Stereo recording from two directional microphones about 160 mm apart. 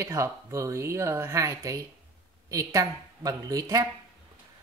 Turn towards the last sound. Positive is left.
turn(degrees=-20)  # may be behind; listen again after turning